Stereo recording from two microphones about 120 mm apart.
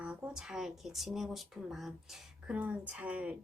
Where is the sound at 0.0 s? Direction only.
10° right (ahead or behind).